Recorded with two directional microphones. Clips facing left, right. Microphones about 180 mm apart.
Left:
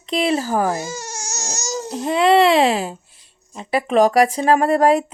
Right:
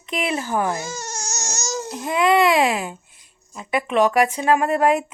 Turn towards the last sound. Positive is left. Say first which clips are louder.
# left 3 dB
turn(degrees=35)  # may be behind; listen again after turning